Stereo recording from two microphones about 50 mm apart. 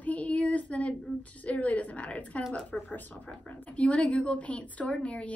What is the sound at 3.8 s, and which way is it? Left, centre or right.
A woman's voice, left.